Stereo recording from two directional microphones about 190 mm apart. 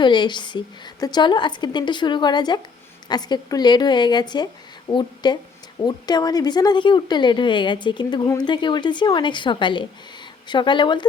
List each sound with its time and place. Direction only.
0.0 s speech: 25° left (ahead or behind)